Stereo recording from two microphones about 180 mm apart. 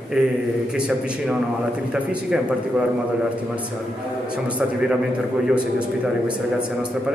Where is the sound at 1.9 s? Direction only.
5° right (ahead or behind).